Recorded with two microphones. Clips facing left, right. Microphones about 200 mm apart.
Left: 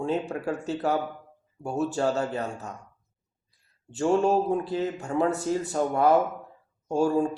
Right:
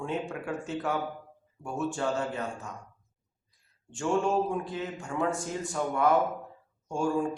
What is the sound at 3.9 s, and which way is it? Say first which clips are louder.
Speech: left 5 dB; 40° left (ahead or behind).